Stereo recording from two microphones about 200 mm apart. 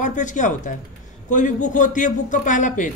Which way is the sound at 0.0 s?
40° left (ahead or behind).